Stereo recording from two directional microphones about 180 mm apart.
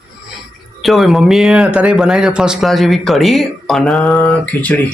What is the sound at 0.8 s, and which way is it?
Speech, centre (ahead or behind).